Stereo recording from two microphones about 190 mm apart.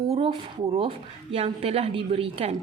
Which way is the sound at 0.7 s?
30° right (ahead or behind).